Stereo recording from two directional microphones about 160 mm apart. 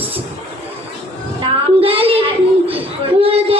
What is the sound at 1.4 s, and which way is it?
Child singing, 35° right (ahead or behind).